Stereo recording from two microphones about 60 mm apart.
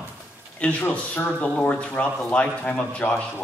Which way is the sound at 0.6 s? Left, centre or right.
Left.